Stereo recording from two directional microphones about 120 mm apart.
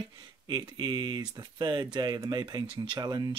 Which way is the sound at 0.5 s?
40° right (ahead or behind).